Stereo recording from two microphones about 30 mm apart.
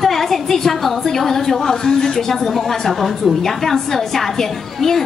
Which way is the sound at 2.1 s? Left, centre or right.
Centre.